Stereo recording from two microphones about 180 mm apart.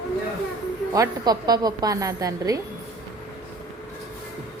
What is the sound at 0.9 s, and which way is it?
A woman's voice, 20° right (ahead or behind).